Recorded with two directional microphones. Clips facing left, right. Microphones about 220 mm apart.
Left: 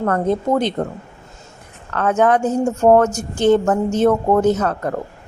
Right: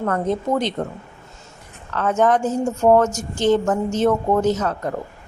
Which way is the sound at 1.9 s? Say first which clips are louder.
Left 2 dB; 60° left (ahead or behind).